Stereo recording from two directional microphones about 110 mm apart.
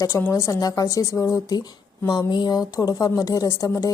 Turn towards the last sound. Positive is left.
turn(degrees=30)  # may be behind; listen again after turning